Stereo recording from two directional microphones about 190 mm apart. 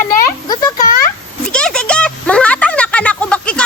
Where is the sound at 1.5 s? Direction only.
5° left (ahead or behind).